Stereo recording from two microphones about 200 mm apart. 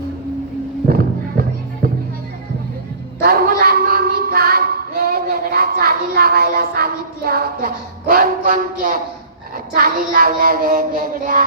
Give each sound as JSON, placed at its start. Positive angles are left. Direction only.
{"t": 0.9, "sound": "music", "side_deg": -50}
{"t": 3.2, "sound": "child singing", "side_deg": -50}